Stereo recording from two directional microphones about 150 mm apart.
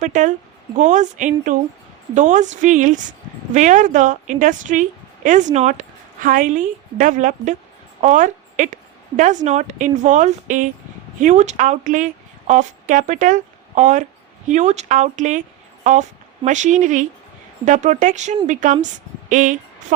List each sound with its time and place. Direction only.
0.0 s a woman's voice: 55° right (ahead or behind)